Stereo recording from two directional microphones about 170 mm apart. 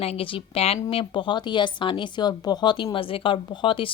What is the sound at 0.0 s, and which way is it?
A woman's voice, 35° left (ahead or behind).